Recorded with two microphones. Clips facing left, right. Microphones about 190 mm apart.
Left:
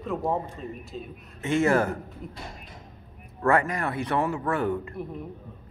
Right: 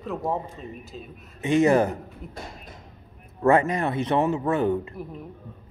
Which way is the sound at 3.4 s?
20° right (ahead or behind).